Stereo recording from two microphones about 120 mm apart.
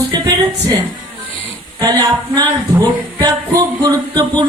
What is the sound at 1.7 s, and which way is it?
Speech, 30° right (ahead or behind).